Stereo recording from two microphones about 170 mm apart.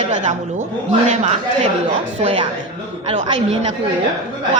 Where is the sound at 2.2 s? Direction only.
30° right (ahead or behind).